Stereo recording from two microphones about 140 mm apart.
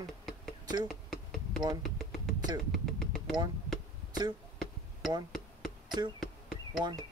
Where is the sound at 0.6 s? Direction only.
30° right (ahead or behind).